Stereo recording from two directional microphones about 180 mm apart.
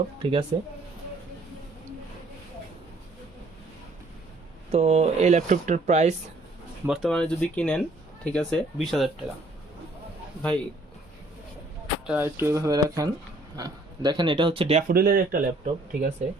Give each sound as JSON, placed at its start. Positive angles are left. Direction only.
{"t": 0.2, "sound": "speech", "side_deg": -30}
{"t": 4.7, "sound": "speech", "side_deg": -35}
{"t": 6.8, "sound": "speech", "side_deg": 0}
{"t": 12.0, "sound": "speech", "side_deg": -10}
{"t": 14.8, "sound": "speech", "side_deg": -55}
{"t": 15.6, "sound": "speech", "side_deg": -45}